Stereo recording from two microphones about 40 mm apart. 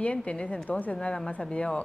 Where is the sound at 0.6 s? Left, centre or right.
Left.